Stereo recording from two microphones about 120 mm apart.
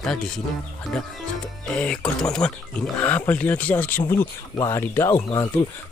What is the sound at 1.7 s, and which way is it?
Speech, 10° left (ahead or behind).